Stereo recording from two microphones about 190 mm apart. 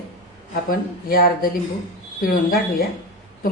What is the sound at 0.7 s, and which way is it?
A woman's voice, 50° left (ahead or behind).